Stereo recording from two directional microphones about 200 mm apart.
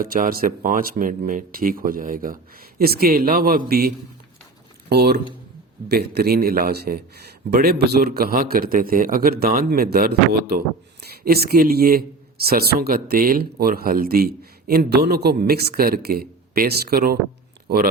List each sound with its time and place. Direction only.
0.0 s speech: 45° right (ahead or behind)